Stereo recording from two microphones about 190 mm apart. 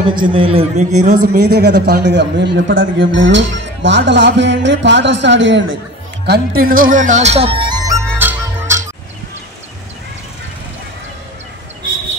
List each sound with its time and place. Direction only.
0.1 s a man's voice: 25° right (ahead or behind)
1.3 s a man's voice: 55° right (ahead or behind); by 5.7 s 75° right (ahead or behind)
6.2 s speech: 55° right (ahead or behind); by 8.0 s 20° right (ahead or behind)
8.2 s music: 10° right (ahead or behind)